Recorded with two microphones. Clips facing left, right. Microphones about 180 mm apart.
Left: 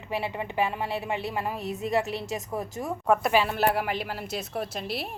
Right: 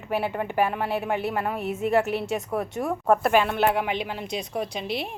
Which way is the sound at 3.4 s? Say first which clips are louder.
Right 2 dB; 5° left (ahead or behind).